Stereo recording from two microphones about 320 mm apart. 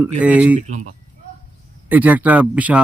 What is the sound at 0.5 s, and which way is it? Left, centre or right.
Speech, right.